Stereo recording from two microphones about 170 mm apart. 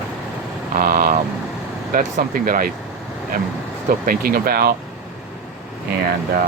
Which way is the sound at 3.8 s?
55° right (ahead or behind).